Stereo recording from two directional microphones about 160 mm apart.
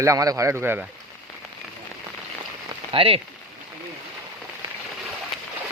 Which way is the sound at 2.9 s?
35° right (ahead or behind).